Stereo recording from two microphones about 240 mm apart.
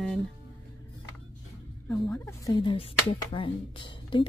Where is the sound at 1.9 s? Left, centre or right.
Centre.